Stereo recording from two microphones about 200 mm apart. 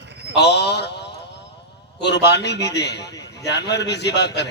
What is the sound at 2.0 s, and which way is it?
A man's voice, 55° left (ahead or behind).